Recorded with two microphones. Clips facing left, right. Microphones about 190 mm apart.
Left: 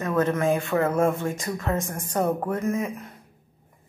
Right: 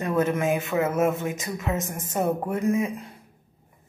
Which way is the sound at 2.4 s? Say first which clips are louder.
Right 2 dB; 10° right (ahead or behind).